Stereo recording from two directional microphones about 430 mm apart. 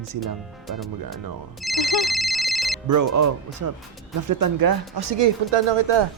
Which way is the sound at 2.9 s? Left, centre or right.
Right.